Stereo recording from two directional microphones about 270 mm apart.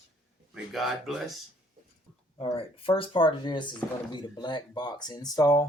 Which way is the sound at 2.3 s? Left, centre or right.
Left.